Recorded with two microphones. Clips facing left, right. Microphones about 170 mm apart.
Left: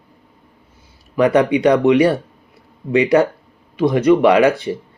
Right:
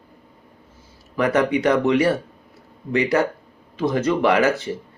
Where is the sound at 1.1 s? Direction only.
15° left (ahead or behind).